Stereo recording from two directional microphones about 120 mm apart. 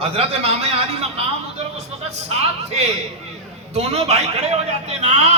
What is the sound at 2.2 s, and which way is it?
A man's voice, 65° right (ahead or behind).